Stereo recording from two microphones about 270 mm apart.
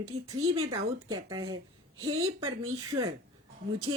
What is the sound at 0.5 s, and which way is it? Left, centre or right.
Speech, centre.